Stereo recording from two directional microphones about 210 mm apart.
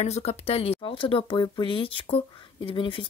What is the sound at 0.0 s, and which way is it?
Speech, 30° left (ahead or behind).